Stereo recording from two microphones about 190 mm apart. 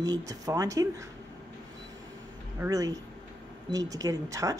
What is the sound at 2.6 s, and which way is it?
Speech, 20° right (ahead or behind).